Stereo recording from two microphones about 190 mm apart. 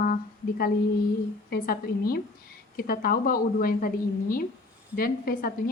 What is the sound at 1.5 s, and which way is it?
A woman's voice, 50° left (ahead or behind).